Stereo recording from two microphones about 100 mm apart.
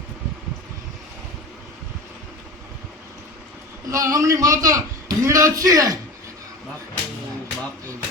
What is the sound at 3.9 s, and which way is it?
A man's voice, 35° right (ahead or behind).